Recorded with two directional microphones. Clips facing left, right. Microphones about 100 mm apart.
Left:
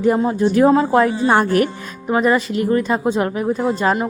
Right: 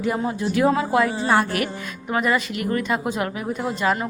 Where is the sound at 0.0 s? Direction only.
35° left (ahead or behind).